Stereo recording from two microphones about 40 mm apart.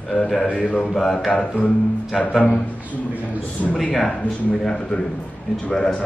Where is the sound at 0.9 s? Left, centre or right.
Centre.